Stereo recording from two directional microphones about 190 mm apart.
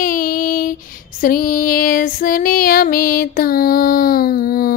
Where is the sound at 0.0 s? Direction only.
45° left (ahead or behind).